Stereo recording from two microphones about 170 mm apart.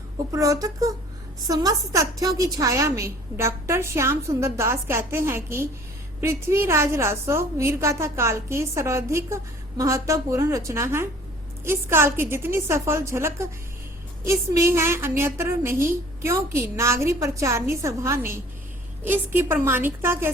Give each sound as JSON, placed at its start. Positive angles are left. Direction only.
{"t": 0.3, "sound": "a woman's voice", "side_deg": -20}